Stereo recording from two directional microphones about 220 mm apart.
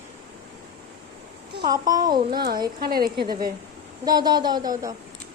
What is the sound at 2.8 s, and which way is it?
Speech, 45° right (ahead or behind).